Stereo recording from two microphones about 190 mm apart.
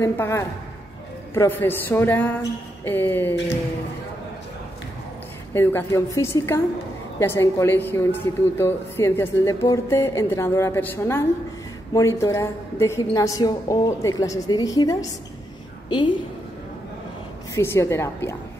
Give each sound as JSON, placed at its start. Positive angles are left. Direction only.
{"t": 0.0, "sound": "a woman's voice", "side_deg": 15}
{"t": 5.5, "sound": "a woman's voice", "side_deg": 10}
{"t": 17.6, "sound": "a woman's voice", "side_deg": 15}